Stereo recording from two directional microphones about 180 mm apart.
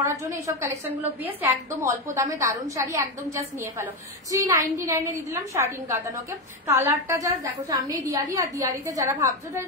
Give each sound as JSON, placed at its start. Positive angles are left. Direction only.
{"t": 0.0, "sound": "a woman's voice", "side_deg": -15}